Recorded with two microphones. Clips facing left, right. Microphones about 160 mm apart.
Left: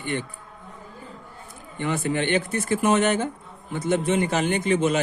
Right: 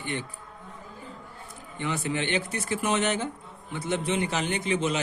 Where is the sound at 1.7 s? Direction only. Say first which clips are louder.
Left 5 dB; 50° left (ahead or behind).